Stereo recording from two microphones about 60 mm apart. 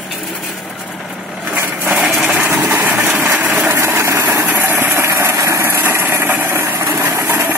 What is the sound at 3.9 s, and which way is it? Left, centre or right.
Engine, right.